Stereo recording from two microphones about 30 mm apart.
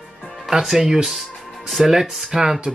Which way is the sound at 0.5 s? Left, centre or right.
Centre.